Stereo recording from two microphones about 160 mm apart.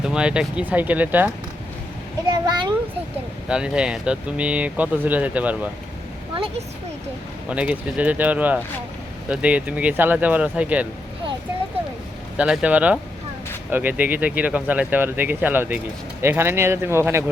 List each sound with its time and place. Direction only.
0.0 s speech: 5° right (ahead or behind)
2.3 s children playing: 25° right (ahead or behind)
3.5 s speech: 5° right (ahead or behind)
6.3 s speech: 35° right (ahead or behind)
7.5 s speech: 10° right (ahead or behind)
12.4 s speech: 10° right (ahead or behind)